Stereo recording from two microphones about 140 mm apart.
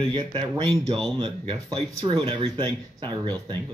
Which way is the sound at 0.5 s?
35° right (ahead or behind).